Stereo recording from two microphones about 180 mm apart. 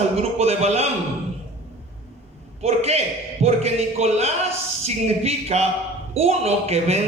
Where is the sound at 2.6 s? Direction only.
35° right (ahead or behind).